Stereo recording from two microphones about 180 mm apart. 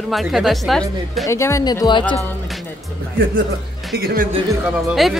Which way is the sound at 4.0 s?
60° right (ahead or behind).